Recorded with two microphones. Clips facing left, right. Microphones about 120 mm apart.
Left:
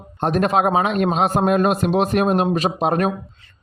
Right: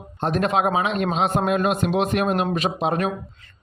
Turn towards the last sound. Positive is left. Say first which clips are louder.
# left 3 dB
turn(degrees=45)  # may be behind; listen again after turning